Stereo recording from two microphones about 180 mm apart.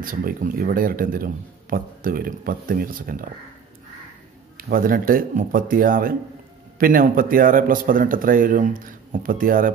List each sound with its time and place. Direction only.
0.0 s speech: 50° right (ahead or behind)
4.6 s speech: 55° right (ahead or behind)